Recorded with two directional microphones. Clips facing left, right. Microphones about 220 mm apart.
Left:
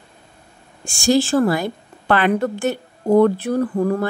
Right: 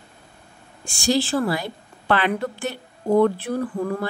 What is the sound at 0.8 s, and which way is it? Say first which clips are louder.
A woman's voice: left 5 dB; 45° left (ahead or behind).